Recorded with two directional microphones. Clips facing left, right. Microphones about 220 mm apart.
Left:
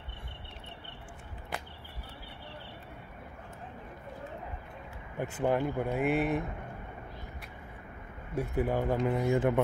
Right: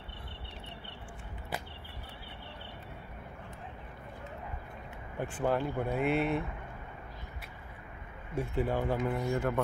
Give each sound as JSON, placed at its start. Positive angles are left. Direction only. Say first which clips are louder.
{"t": 5.4, "sound": "speech", "louder": "left 2 dB", "side_deg": 10}
{"t": 8.4, "sound": "speech", "louder": "left 2 dB", "side_deg": 10}
{"t": 8.8, "sound": "speech", "louder": "left 2 dB", "side_deg": 0}
{"t": 9.2, "sound": "speech", "louder": "left 4 dB", "side_deg": 15}